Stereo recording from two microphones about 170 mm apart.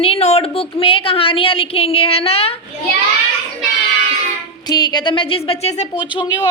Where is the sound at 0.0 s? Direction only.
35° left (ahead or behind).